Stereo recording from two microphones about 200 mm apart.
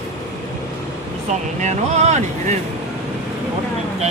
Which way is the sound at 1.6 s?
35° right (ahead or behind).